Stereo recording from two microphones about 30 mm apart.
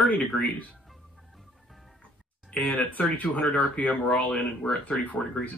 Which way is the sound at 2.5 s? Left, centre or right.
Left.